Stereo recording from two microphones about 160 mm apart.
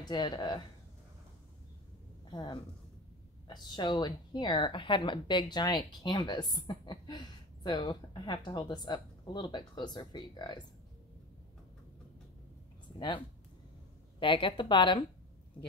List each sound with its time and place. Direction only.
0.0 s speech: 25° left (ahead or behind)
2.3 s speech: 25° left (ahead or behind)
14.2 s a woman's voice: 30° left (ahead or behind)